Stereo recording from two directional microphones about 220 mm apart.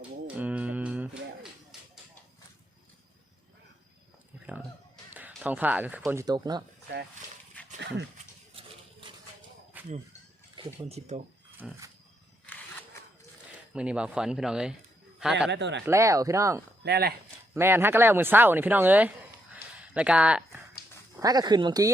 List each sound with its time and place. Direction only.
0.3 s music: 5° right (ahead or behind)
5.1 s speech: 5° right (ahead or behind)
9.7 s a sound: 10° right (ahead or behind)
10.5 s speech: 25° right (ahead or behind)
11.5 s a sound: 10° right (ahead or behind)
13.7 s speech: 5° right (ahead or behind)
15.4 s speech: 50° right (ahead or behind)
15.9 s speech: 15° right (ahead or behind)
16.8 s speech: 45° right (ahead or behind)
17.5 s speech: 10° right (ahead or behind)
19.8 s a sound: 5° right (ahead or behind)
21.2 s speech: 15° right (ahead or behind)